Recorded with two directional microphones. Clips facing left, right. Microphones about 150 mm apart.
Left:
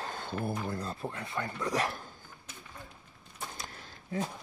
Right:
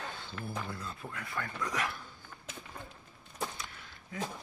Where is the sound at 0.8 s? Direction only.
35° left (ahead or behind).